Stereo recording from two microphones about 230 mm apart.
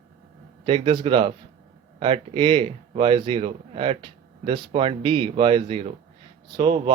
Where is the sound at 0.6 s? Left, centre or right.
Right.